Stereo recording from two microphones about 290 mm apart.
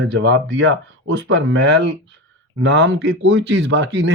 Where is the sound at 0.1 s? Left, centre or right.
Right.